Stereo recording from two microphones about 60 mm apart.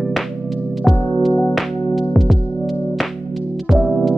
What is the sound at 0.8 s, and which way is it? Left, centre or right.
Music, centre.